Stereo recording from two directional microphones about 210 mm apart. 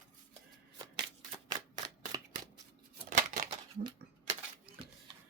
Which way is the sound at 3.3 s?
25° right (ahead or behind).